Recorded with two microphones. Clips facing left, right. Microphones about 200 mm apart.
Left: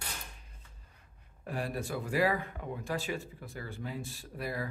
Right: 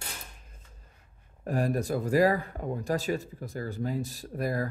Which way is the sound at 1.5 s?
45° right (ahead or behind).